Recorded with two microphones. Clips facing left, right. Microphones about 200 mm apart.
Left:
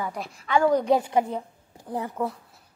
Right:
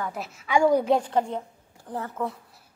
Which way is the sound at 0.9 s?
10° left (ahead or behind).